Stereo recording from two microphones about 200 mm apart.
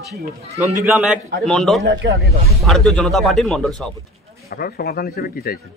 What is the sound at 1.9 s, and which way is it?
Speech, 55° right (ahead or behind).